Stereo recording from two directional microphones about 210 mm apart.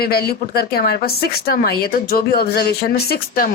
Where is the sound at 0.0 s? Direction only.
50° left (ahead or behind).